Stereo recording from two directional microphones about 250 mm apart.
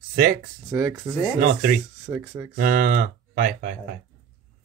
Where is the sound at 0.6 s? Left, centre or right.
Centre.